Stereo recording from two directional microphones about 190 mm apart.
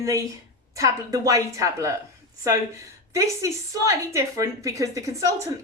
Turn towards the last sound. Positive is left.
turn(degrees=-15)  # may be behind; listen again after turning